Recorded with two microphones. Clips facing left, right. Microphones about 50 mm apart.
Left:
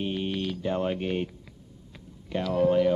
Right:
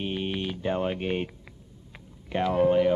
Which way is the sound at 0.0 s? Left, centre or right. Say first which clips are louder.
Left 1 dB; centre.